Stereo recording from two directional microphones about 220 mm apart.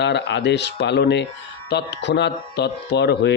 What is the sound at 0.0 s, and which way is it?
Speech, 50° left (ahead or behind).